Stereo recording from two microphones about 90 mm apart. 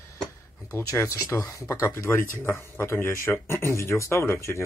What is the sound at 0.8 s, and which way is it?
Speech, 35° left (ahead or behind).